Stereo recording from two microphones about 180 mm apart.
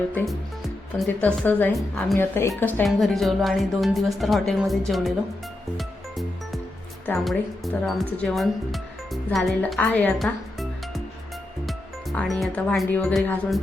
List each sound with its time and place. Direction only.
0.9 s speech: 5° left (ahead or behind)
2.1 s a woman's voice: 15° left (ahead or behind)
2.8 s speech: centre (ahead or behind)
5.7 s music: centre (ahead or behind)
7.3 s speech: centre (ahead or behind)